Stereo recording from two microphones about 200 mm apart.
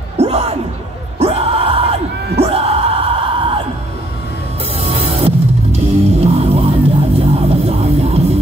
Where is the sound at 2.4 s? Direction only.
30° right (ahead or behind).